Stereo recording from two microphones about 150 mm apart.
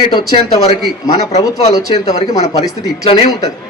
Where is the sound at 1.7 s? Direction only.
25° left (ahead or behind).